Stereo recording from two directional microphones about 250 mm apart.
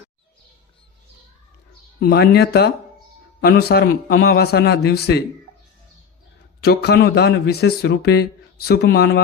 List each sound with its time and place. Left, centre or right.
2.0 s speech: left
6.6 s speech: left